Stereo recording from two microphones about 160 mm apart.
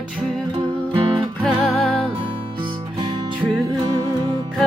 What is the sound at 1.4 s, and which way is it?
Music, 5° left (ahead or behind).